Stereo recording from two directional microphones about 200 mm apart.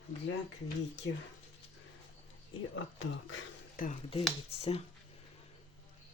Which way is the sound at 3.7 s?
45° left (ahead or behind).